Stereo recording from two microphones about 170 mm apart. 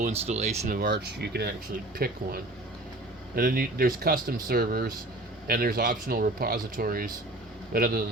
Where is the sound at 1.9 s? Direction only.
60° right (ahead or behind).